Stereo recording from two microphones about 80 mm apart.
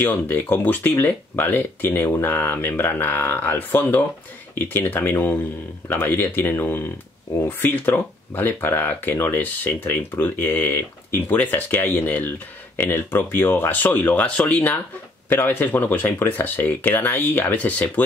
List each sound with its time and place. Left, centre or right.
0.0 s speech: left